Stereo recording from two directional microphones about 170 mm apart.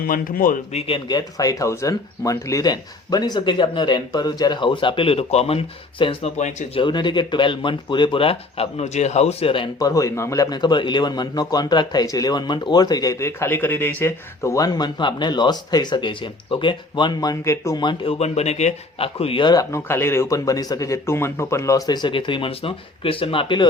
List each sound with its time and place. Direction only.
0.0 s speech: 55° left (ahead or behind)
6.8 s speech: 25° left (ahead or behind)